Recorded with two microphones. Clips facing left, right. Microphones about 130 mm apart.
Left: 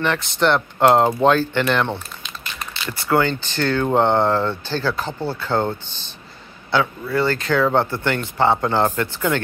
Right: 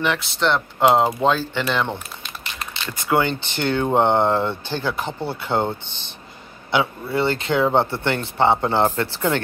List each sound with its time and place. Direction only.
0.0 s speech: 5° right (ahead or behind)
2.9 s speech: 20° right (ahead or behind)